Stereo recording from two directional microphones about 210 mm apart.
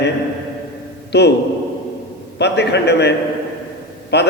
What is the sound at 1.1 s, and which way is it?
Speech, 50° left (ahead or behind).